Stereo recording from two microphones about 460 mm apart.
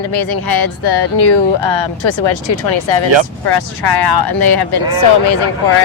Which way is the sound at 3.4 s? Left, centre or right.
Left.